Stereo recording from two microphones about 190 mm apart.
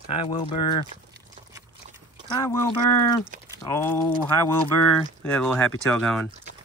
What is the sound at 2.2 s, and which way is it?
Speech, 25° left (ahead or behind).